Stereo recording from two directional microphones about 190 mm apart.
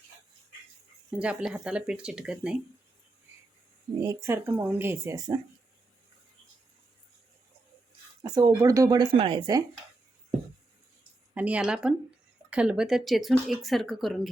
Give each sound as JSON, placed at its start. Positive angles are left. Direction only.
{"t": 1.1, "sound": "speech", "side_deg": -5}
{"t": 4.0, "sound": "speech", "side_deg": -15}
{"t": 8.2, "sound": "speech", "side_deg": -15}
{"t": 11.3, "sound": "speech", "side_deg": -5}